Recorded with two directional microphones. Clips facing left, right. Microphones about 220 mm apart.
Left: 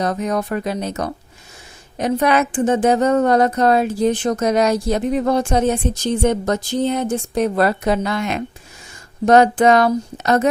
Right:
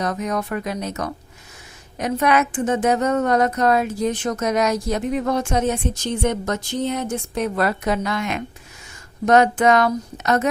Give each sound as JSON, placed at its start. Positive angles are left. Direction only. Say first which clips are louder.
{"t": 0.0, "sound": "a woman's voice", "louder": "left 3 dB", "side_deg": 30}